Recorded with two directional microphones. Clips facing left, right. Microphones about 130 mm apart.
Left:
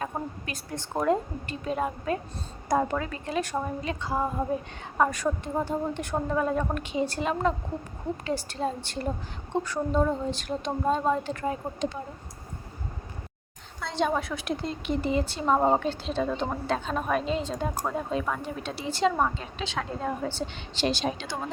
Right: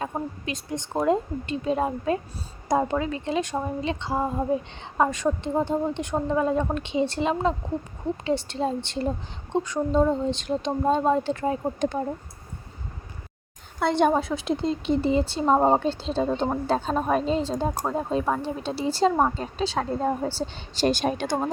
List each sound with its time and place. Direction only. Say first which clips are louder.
0.4 s a woman's voice: right 5 dB; 20° right (ahead or behind)
11.8 s speech: right 5 dB; 50° right (ahead or behind)
13.7 s a woman's voice: right 7 dB; 60° right (ahead or behind)
14.1 s speech: right 5 dB; 25° right (ahead or behind)
20.7 s speech: right 5 dB; 45° right (ahead or behind)